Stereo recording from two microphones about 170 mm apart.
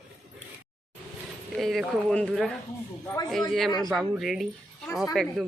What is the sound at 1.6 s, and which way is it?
Speech, centre (ahead or behind).